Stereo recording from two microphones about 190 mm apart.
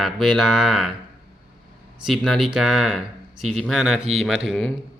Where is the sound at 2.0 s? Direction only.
Centre (ahead or behind).